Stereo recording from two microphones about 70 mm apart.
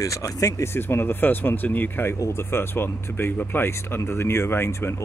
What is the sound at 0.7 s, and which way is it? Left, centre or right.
Speech, left.